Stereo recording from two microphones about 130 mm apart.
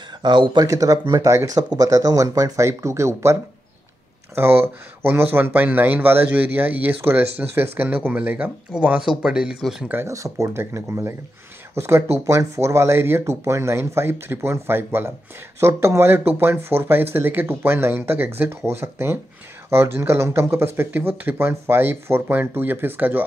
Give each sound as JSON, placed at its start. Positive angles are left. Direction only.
{"t": 0.2, "sound": "speech", "side_deg": -35}
{"t": 4.4, "sound": "speech", "side_deg": -15}
{"t": 9.8, "sound": "speech", "side_deg": -20}